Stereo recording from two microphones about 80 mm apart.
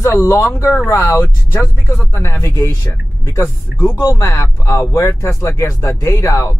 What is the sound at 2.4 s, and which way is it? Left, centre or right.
Speech, left.